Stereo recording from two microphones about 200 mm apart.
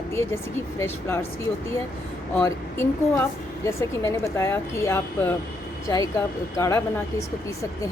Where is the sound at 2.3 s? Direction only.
10° left (ahead or behind).